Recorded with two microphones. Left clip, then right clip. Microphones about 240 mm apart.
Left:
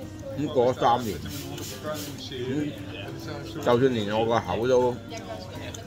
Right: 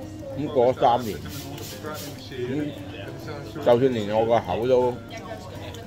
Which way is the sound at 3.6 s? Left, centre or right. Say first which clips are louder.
Right 3 dB; left.